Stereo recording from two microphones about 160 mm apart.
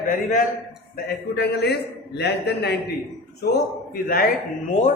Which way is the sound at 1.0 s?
90° left.